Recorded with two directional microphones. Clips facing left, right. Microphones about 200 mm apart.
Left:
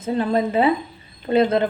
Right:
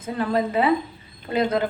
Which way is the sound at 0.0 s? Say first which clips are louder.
Left 3 dB; 25° left (ahead or behind).